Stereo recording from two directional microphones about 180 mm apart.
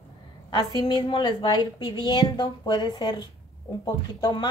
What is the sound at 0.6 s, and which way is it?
A woman's voice, 20° left (ahead or behind).